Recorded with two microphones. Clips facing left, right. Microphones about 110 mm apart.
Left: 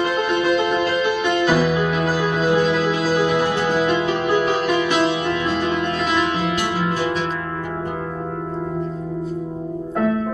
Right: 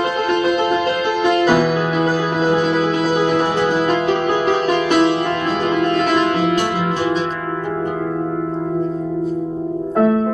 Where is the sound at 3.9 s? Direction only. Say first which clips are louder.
Right 2 dB; 40° right (ahead or behind).